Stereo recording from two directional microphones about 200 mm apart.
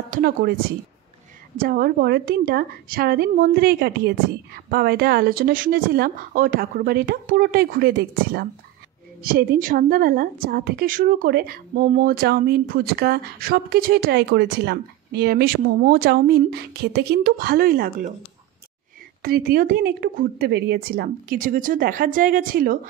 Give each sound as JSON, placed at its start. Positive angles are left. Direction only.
{"t": 0.1, "sound": "a woman's voice", "side_deg": -45}
{"t": 1.6, "sound": "a woman's voice", "side_deg": -50}
{"t": 19.2, "sound": "a woman's voice", "side_deg": -50}